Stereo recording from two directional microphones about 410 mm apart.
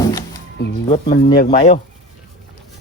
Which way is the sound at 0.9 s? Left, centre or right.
Left.